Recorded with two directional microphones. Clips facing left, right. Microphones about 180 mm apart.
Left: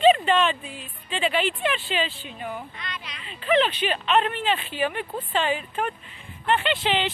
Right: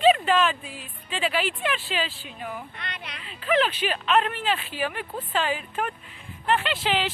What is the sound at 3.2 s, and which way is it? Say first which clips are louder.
Speech: left 2 dB; centre (ahead or behind).